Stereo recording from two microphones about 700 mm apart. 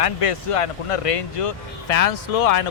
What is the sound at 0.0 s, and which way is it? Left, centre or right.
Speech, left.